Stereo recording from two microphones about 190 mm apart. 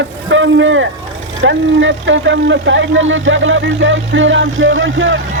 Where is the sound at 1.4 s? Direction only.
80° right.